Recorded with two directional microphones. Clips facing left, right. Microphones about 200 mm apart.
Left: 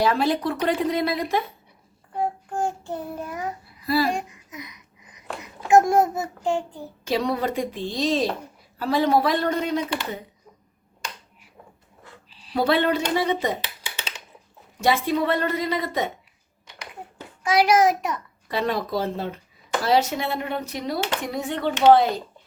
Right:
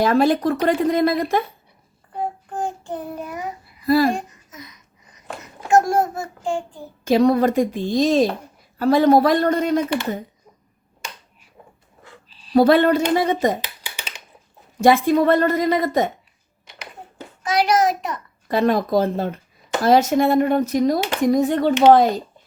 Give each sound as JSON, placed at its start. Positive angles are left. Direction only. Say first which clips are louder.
{"t": 0.0, "sound": "speech", "louder": "right 5 dB", "side_deg": -45}
{"t": 2.1, "sound": "child singing", "louder": "even", "side_deg": 10}
{"t": 3.2, "sound": "a child's voice", "louder": "right 1 dB", "side_deg": -5}
{"t": 3.8, "sound": "speech", "louder": "right 6 dB", "side_deg": -50}
{"t": 4.1, "sound": "babbling", "louder": "right 2 dB", "side_deg": 15}
{"t": 5.6, "sound": "a sound", "louder": "even", "side_deg": 20}
{"t": 7.0, "sound": "speech", "louder": "right 9 dB", "side_deg": -45}
{"t": 12.3, "sound": "a sound", "louder": "even", "side_deg": 20}
{"t": 12.5, "sound": "speech", "louder": "right 7 dB", "side_deg": -45}
{"t": 14.8, "sound": "speech", "louder": "right 7 dB", "side_deg": -45}
{"t": 17.5, "sound": "a child's voice", "louder": "even", "side_deg": 10}
{"t": 18.4, "sound": "speech", "louder": "right 7 dB", "side_deg": -45}